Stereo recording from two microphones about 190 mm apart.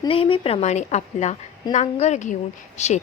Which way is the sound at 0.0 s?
30° left (ahead or behind).